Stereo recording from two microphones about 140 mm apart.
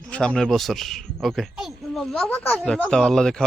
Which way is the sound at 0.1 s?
5° left (ahead or behind).